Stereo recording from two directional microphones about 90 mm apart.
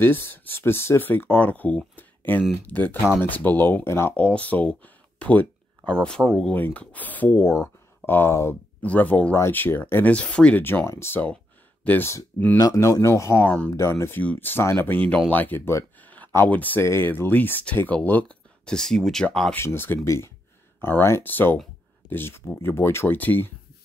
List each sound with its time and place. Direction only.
0.0 s speech: 25° left (ahead or behind)
4.1 s speech: 15° left (ahead or behind)
6.5 s speech: 15° left (ahead or behind)
8.8 s speech: 15° left (ahead or behind)
10.6 s speech: 25° left (ahead or behind)
12.5 s speech: 35° left (ahead or behind); by 13.7 s 20° left (ahead or behind)
13.7 s speech: 30° left (ahead or behind); by 19.2 s 5° left (ahead or behind)
19.5 s speech: 25° left (ahead or behind)